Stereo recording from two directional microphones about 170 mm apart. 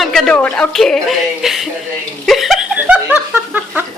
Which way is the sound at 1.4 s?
Centre (ahead or behind).